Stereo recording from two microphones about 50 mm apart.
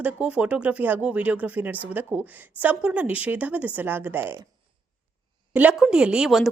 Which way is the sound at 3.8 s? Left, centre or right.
Right.